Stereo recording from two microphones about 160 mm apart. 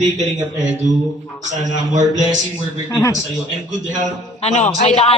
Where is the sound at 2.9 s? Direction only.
15° left (ahead or behind).